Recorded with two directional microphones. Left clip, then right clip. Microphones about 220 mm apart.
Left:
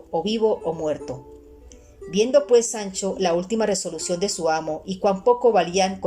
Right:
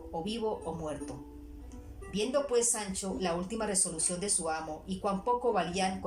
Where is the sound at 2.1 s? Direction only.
40° left (ahead or behind).